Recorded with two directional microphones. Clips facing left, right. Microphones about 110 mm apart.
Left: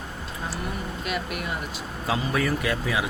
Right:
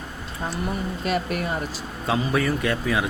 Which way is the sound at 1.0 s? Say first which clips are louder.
Right 6 dB; 40° right (ahead or behind).